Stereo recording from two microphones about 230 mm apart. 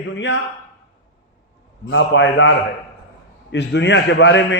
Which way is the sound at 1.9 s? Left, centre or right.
Left.